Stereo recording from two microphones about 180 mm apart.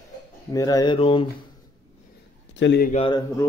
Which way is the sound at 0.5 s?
20° left (ahead or behind).